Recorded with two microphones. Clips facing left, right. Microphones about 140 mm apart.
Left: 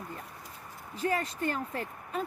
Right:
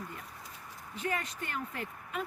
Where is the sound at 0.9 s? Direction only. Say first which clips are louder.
Left 5 dB; 35° left (ahead or behind).